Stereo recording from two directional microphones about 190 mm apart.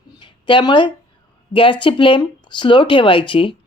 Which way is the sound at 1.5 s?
25° left (ahead or behind).